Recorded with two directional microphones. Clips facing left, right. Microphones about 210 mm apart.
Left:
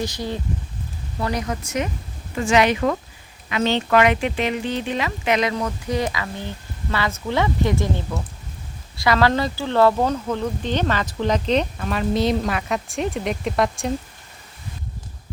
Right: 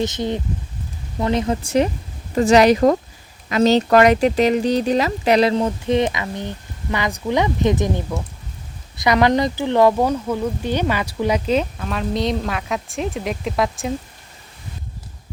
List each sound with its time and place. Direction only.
0.0 s speech: 20° right (ahead or behind); by 13.9 s centre (ahead or behind)